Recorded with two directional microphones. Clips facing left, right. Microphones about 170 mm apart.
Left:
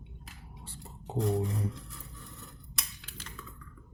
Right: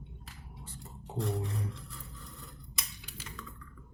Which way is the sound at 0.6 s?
30° left (ahead or behind).